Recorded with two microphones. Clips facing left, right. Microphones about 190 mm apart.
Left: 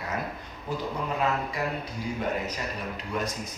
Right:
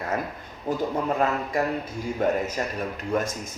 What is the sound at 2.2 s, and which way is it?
Speech, 50° right (ahead or behind).